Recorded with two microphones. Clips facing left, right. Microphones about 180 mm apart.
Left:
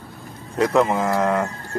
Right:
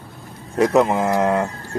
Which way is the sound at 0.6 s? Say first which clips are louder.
Right 2 dB; 20° right (ahead or behind).